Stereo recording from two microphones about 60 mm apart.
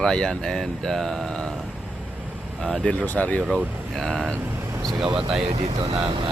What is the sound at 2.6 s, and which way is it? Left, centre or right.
Speech, centre.